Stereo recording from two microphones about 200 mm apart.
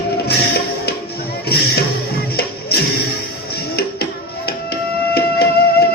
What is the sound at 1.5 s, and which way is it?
Speech, 50° left (ahead or behind).